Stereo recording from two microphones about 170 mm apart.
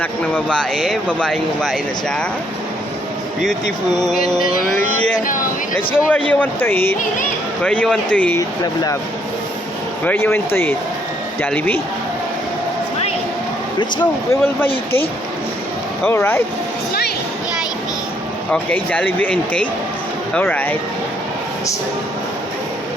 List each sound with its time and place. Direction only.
0.0 s speech: 10° left (ahead or behind)
4.0 s speech: 5° left (ahead or behind)
4.4 s mantra: 50° left (ahead or behind)
5.9 s speech: 10° left (ahead or behind)
8.4 s speech: 20° left (ahead or behind)
10.1 s speech: 15° left (ahead or behind)
14.0 s speech: 10° left (ahead or behind)
16.0 s speech: 10° left (ahead or behind)
18.5 s speech: 10° left (ahead or behind)